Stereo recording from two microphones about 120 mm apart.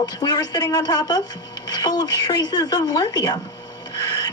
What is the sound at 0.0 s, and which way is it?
A woman's voice, 35° left (ahead or behind).